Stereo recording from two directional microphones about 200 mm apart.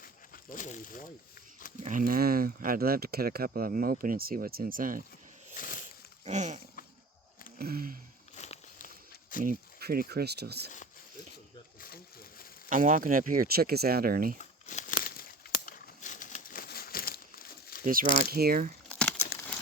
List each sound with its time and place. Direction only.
0.5 s speech: 40° left (ahead or behind)
1.8 s speech: 40° right (ahead or behind)
5.5 s a sound: 45° left (ahead or behind)
5.8 s a sound: 35° right (ahead or behind)
7.6 s speech: 45° right (ahead or behind)
8.4 s walk: 35° left (ahead or behind)
9.4 s speech: 45° right (ahead or behind)
11.8 s a sound: 50° left (ahead or behind)
12.6 s speech: 40° right (ahead or behind)
14.3 s crumpling: 40° left (ahead or behind)
17.8 s speech: 45° right (ahead or behind)
18.9 s crumpling: 5° left (ahead or behind)